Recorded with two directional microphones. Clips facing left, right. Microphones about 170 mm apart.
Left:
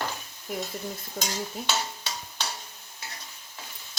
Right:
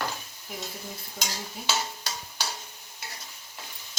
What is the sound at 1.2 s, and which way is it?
Stir, 65° left (ahead or behind).